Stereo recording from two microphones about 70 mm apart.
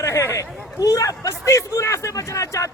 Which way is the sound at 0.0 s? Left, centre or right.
Left.